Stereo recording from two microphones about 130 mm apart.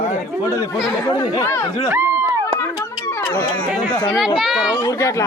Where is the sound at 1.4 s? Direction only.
20° left (ahead or behind).